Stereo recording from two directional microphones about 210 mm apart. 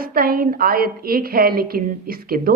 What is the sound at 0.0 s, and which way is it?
A woman's voice, 45° right (ahead or behind).